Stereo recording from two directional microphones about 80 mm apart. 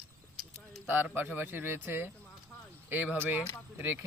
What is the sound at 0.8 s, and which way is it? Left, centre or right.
Speech, right.